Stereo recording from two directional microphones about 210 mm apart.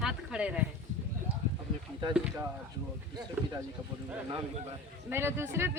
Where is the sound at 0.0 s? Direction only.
5° right (ahead or behind).